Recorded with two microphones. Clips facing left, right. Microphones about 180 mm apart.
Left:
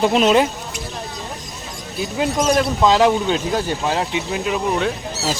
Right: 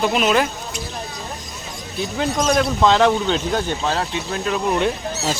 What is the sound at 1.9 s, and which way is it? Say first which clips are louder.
Speech: left 1 dB; 5° left (ahead or behind).